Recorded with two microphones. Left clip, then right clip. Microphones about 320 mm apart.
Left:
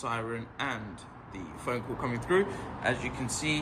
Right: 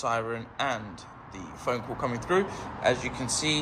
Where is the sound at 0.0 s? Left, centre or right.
Centre.